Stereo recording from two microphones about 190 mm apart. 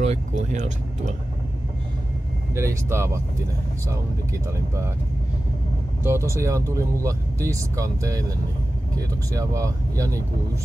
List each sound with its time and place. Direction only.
0.0 s speech: 35° right (ahead or behind)
2.5 s speech: 15° right (ahead or behind)
6.0 s speech: 15° right (ahead or behind)
9.3 s speech: 15° right (ahead or behind)